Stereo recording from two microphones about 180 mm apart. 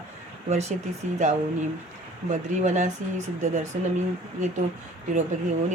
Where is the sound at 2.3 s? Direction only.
40° right (ahead or behind).